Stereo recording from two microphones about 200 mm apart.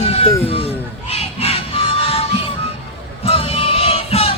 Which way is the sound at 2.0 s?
30° left (ahead or behind).